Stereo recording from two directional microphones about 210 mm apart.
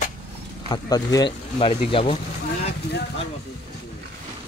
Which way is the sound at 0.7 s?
15° left (ahead or behind).